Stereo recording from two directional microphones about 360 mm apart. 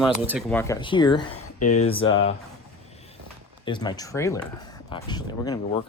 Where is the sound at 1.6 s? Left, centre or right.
Left.